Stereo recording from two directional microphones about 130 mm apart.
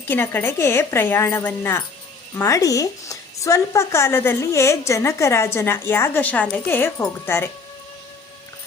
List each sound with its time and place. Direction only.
0.1 s a woman's voice: 15° left (ahead or behind)